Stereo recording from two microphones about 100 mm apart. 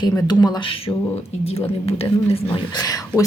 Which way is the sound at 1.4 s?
90° left.